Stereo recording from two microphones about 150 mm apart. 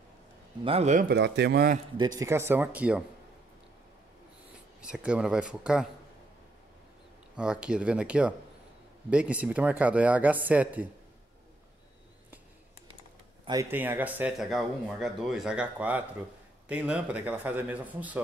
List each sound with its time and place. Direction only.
0.7 s speech: 45° right (ahead or behind)
0.9 s speech: 90° right
2.0 s speech: 25° right (ahead or behind); by 3.0 s 10° right (ahead or behind)
4.8 s speech: 5° right (ahead or behind)
7.3 s speech: 5° right (ahead or behind)
13.7 s speech: 10° right (ahead or behind)